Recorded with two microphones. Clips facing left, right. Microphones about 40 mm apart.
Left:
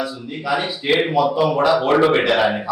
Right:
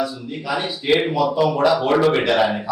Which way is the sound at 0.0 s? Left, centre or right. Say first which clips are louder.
Even; centre.